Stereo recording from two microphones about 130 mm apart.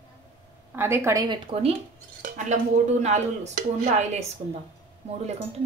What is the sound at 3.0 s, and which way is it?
Speech, 65° right (ahead or behind).